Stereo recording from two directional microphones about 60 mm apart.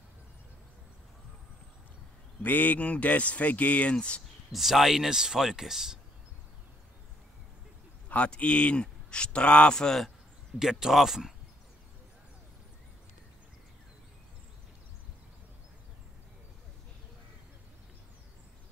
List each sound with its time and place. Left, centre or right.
2.4 s speech: left
4.5 s speech: centre
8.1 s a man's voice: left
10.6 s speech: centre